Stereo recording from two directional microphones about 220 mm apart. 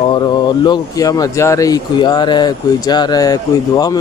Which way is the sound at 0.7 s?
15° left (ahead or behind).